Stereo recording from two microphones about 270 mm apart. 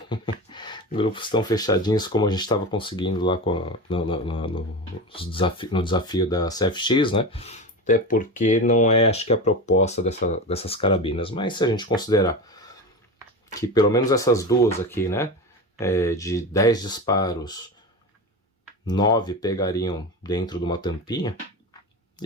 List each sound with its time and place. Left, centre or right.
0.1 s speech: centre
18.9 s speech: centre